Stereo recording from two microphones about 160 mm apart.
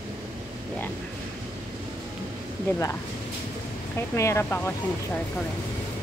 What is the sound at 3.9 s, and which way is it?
Speech, 15° left (ahead or behind).